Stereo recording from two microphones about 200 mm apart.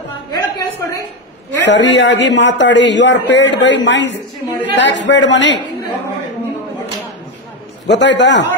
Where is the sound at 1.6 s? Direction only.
60° left (ahead or behind).